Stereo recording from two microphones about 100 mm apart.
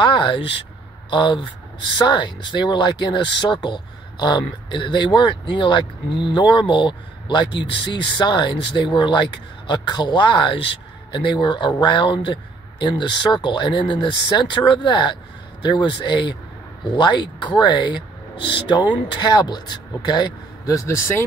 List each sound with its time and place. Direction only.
0.0 s speech: 55° left (ahead or behind)
20.6 s speech: 30° left (ahead or behind)